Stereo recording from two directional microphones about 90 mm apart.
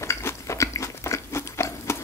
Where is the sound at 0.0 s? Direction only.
30° left (ahead or behind).